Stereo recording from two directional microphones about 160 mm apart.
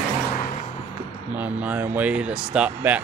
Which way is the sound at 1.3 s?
10° right (ahead or behind).